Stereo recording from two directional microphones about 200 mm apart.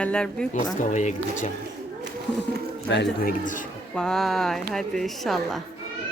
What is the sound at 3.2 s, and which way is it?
Speech, 40° left (ahead or behind).